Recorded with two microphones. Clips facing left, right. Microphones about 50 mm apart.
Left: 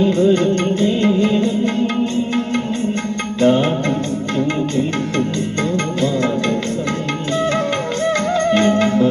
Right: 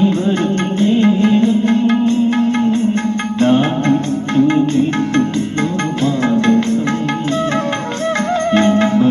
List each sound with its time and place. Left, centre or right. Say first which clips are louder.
0.8 s music: right 6 dB; right
6.0 s music: right 4 dB; right
8.8 s music: right 2 dB; right